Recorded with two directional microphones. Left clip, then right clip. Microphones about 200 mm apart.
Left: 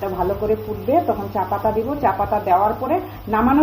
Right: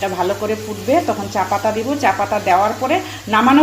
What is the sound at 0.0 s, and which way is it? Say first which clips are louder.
Speech: right 3 dB; 20° right (ahead or behind).